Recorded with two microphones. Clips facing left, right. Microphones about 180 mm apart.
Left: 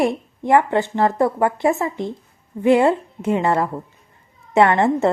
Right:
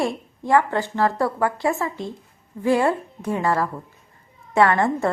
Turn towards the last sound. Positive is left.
turn(degrees=20)  # may be behind; listen again after turning